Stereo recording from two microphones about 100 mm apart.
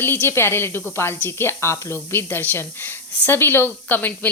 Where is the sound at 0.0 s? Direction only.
20° left (ahead or behind).